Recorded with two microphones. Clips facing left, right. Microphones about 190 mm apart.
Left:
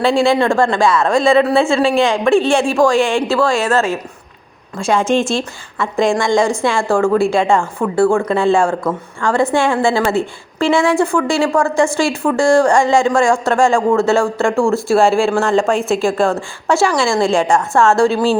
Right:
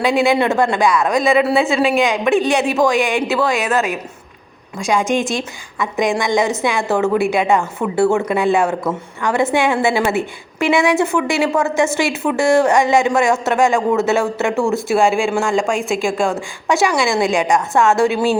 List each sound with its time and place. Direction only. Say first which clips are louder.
0.0 s a woman's voice: left 2 dB; 15° right (ahead or behind)